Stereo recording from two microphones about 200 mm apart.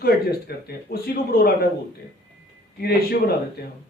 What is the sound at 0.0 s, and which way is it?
Speech, 50° left (ahead or behind).